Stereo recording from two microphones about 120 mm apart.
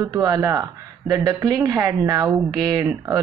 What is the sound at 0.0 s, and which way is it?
A woman's voice, 25° right (ahead or behind).